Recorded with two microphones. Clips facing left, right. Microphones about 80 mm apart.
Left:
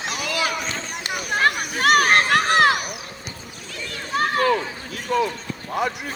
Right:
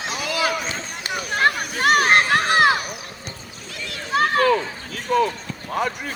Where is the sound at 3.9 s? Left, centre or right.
Right.